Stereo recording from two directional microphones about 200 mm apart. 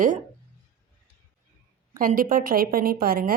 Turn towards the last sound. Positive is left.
turn(degrees=-45)  # may be behind; listen again after turning